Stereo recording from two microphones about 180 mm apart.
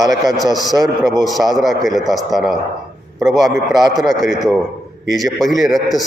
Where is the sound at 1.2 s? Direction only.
Centre (ahead or behind).